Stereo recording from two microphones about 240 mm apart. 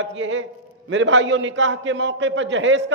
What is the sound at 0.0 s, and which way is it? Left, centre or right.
A man's voice, right.